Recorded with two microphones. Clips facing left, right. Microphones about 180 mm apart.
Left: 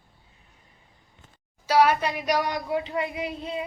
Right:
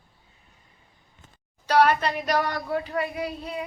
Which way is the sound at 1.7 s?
10° left (ahead or behind).